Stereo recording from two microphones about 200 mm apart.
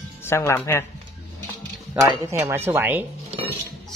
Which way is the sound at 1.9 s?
15° right (ahead or behind).